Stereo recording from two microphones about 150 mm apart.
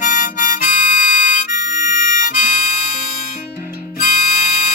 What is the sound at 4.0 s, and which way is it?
Music, 60° left (ahead or behind).